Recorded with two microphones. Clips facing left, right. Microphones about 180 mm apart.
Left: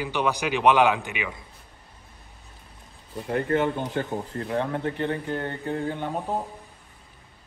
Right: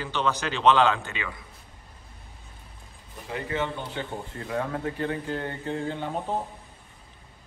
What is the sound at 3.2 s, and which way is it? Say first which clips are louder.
Speech: left 6 dB; 55° left (ahead or behind).